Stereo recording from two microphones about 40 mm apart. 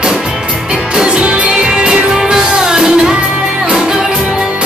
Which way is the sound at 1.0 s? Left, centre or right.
Right.